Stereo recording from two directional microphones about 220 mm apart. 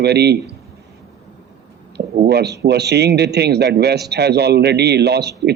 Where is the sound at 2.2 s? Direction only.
50° right (ahead or behind).